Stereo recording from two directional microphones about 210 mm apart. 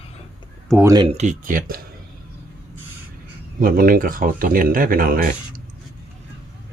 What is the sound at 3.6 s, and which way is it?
Speech, 45° right (ahead or behind).